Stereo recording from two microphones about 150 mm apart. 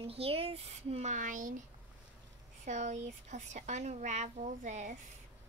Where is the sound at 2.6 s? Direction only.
55° right (ahead or behind).